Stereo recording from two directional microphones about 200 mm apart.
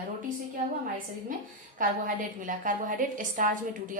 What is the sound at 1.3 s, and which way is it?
A woman's voice, 40° right (ahead or behind).